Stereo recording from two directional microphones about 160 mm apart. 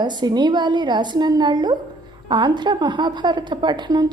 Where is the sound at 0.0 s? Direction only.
25° right (ahead or behind).